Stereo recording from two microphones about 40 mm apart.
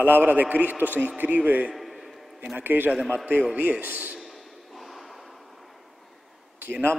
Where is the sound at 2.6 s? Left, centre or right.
Right.